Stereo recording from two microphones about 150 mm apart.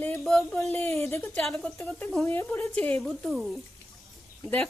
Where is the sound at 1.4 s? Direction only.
5° left (ahead or behind).